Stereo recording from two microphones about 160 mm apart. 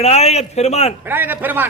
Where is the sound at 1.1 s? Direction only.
10° right (ahead or behind).